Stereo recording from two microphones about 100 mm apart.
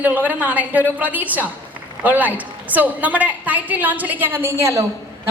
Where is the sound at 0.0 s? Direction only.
20° right (ahead or behind).